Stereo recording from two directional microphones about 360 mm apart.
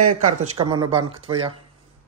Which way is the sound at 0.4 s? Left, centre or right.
Centre.